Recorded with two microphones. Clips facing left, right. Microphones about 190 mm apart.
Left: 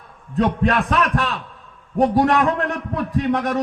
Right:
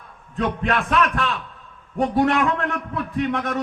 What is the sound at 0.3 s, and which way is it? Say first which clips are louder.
A man's voice: left 4 dB; 35° left (ahead or behind).